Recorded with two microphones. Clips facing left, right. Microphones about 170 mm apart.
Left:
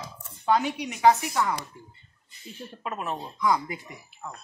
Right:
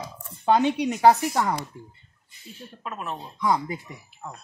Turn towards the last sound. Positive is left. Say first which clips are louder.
# right 1 dB
turn(degrees=-25)  # may be behind; listen again after turning